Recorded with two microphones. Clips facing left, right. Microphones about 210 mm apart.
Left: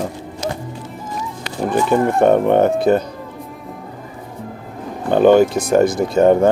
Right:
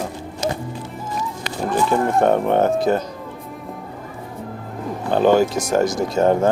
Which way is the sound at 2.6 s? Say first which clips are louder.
Left 3 dB; 60° left (ahead or behind).